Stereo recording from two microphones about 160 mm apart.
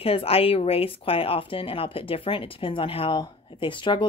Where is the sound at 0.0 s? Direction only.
40° left (ahead or behind).